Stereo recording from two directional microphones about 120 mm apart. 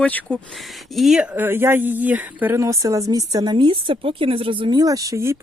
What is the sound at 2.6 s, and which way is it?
Speech, 25° right (ahead or behind).